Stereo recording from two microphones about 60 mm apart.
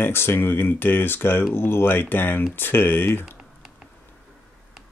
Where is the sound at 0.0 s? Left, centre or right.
Left.